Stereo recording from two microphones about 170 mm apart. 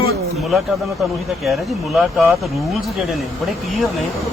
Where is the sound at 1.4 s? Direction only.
Centre (ahead or behind).